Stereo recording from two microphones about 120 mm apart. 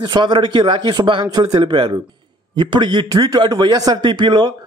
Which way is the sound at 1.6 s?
45° right (ahead or behind).